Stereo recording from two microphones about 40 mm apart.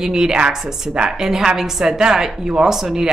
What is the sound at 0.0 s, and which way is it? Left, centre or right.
Speech, centre.